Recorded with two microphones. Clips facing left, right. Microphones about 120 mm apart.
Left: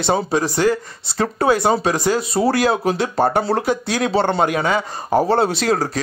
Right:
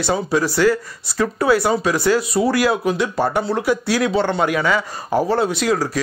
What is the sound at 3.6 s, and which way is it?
Speech, 25° left (ahead or behind).